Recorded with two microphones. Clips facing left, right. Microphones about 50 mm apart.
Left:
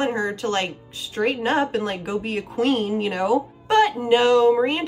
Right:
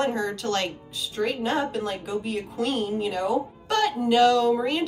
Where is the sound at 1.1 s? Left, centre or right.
Left.